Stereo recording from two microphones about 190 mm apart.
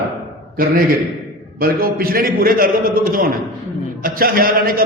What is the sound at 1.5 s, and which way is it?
A man's voice, 50° right (ahead or behind).